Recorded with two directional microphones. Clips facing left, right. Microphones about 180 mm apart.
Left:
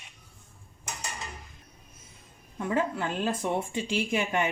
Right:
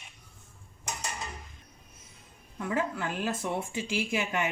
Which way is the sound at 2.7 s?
25° left (ahead or behind).